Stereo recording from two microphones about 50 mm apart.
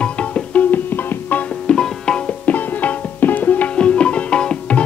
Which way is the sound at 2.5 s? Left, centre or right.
Left.